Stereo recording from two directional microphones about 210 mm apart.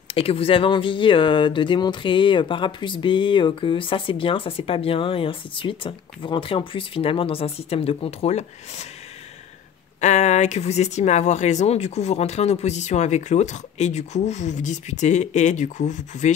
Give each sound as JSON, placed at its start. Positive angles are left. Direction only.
{"t": 0.1, "sound": "speech", "side_deg": 25}
{"t": 9.9, "sound": "speech", "side_deg": 35}